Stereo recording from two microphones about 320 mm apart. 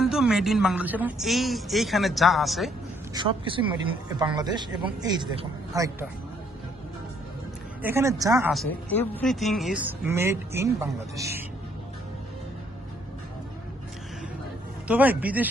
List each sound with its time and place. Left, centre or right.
0.0 s a woman's voice: centre
3.2 s speech: centre
7.8 s speech: centre
14.8 s a woman's voice: centre